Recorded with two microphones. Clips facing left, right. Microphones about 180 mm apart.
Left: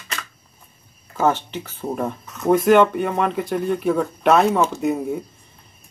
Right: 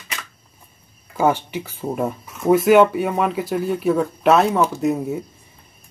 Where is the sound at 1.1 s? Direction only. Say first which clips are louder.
Right 1 dB; 10° right (ahead or behind).